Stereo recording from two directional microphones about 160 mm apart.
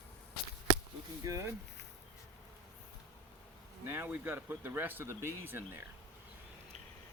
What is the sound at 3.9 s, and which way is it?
Speech, 10° right (ahead or behind).